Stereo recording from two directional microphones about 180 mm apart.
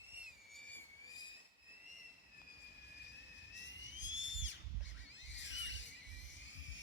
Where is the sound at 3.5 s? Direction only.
90° left.